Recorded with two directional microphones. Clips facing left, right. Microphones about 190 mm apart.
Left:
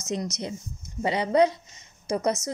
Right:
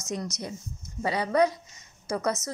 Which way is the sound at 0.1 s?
20° left (ahead or behind).